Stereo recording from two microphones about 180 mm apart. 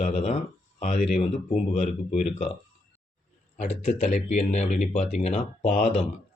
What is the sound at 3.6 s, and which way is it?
Speech, 40° left (ahead or behind).